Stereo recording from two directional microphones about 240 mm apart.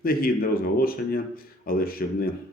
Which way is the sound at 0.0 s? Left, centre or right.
Left.